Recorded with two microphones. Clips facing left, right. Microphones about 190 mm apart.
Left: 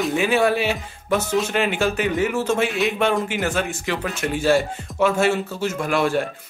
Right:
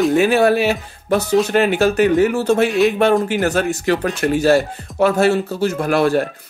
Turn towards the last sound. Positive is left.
turn(degrees=-40)  # may be behind; listen again after turning